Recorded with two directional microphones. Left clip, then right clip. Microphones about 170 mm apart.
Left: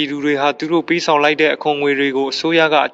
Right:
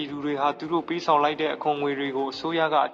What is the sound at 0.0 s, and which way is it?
Speech, 40° left (ahead or behind).